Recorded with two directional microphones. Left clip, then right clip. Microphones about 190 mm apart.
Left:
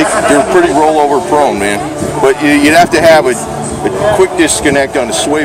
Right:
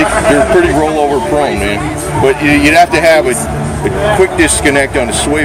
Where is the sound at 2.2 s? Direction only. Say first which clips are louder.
Left 1 dB; 20° left (ahead or behind).